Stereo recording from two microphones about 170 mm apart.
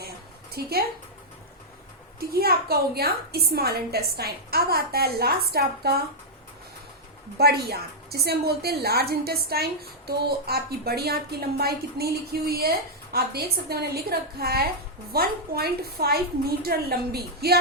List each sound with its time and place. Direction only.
0.5 s a woman's voice: 65° right (ahead or behind)
2.1 s a woman's voice: 65° right (ahead or behind)
7.3 s a woman's voice: 70° right (ahead or behind)